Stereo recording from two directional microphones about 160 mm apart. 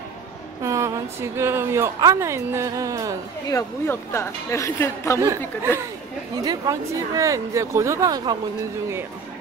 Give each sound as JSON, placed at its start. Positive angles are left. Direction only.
{"t": 0.6, "sound": "a woman's voice", "side_deg": -20}
{"t": 3.4, "sound": "speech", "side_deg": 15}
{"t": 6.3, "sound": "a woman's voice", "side_deg": -25}